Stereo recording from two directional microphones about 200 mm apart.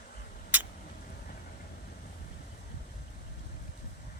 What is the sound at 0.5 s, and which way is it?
Vehicle, 10° right (ahead or behind).